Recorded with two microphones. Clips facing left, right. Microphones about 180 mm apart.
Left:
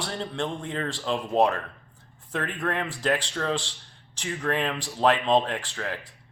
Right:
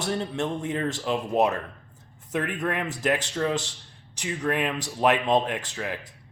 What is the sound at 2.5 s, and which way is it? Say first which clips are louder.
Speech: right 1 dB; 10° right (ahead or behind).